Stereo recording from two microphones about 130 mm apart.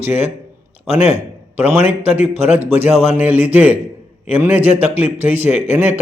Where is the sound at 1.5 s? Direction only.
15° right (ahead or behind).